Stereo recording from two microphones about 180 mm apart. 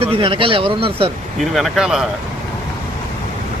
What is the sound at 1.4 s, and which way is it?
Speech, centre (ahead or behind).